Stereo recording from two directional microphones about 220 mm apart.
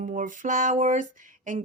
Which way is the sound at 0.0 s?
35° right (ahead or behind).